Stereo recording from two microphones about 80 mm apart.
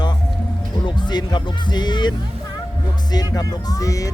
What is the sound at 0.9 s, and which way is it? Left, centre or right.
Speech, left.